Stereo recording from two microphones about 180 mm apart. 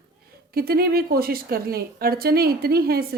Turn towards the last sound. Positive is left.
turn(degrees=-60)  # may be behind; listen again after turning